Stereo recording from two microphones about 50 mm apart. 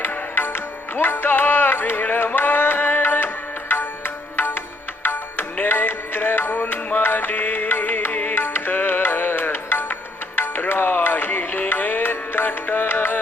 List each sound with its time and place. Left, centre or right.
0.3 s music: left